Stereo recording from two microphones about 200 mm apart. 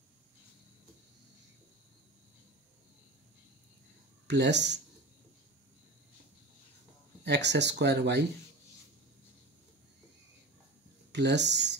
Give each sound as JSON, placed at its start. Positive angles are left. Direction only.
{"t": 4.3, "sound": "speech", "side_deg": -60}
{"t": 7.2, "sound": "speech", "side_deg": -60}
{"t": 11.1, "sound": "speech", "side_deg": -60}